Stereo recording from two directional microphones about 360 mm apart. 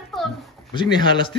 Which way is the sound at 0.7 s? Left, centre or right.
Centre.